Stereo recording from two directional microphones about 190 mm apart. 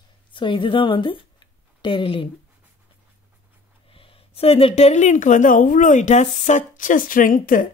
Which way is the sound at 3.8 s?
30° left (ahead or behind).